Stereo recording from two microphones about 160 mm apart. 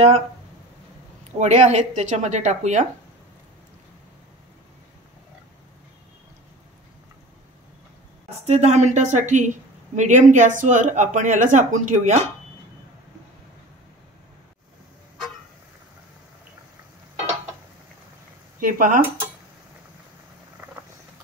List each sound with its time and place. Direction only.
1.4 s speech: 45° right (ahead or behind)
8.3 s speech: 45° right (ahead or behind)
18.6 s speech: 55° right (ahead or behind)
20.6 s a sound: 15° right (ahead or behind)